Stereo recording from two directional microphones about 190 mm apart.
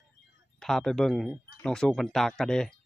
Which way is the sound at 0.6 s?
Centre (ahead or behind).